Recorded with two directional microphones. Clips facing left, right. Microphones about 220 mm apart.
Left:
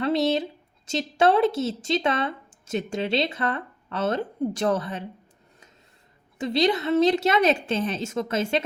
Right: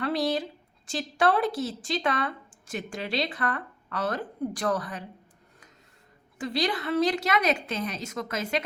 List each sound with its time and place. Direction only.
0.0 s a sound: 25° left (ahead or behind)
0.9 s speech: 25° left (ahead or behind)
6.4 s speech: 25° left (ahead or behind)